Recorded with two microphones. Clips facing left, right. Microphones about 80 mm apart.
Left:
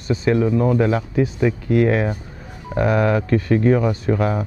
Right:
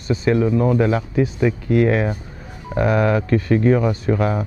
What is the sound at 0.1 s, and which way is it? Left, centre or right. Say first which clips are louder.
Speech: even; centre.